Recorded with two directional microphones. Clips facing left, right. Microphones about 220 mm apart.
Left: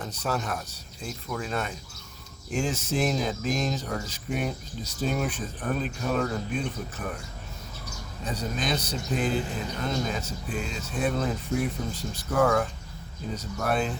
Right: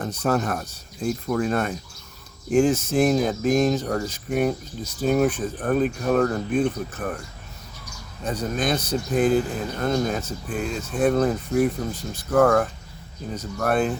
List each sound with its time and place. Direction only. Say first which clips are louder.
0.0 s speech: right 7 dB; 50° right (ahead or behind)
8.2 s speech: right 6 dB; 50° right (ahead or behind)